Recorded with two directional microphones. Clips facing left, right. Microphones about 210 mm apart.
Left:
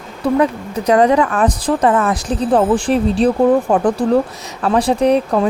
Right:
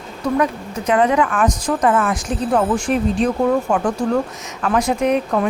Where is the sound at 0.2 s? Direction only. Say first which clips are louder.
Left 4 dB; 30° left (ahead or behind).